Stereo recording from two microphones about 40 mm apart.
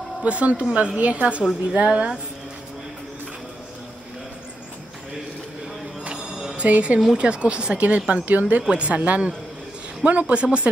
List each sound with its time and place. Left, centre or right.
0.2 s speech: right
6.5 s speech: right
7.2 s speech: right
8.6 s speech: right